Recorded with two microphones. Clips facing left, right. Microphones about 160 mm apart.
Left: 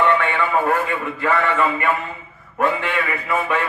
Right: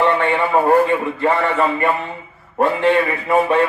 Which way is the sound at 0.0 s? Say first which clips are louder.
Right 2 dB; 35° right (ahead or behind).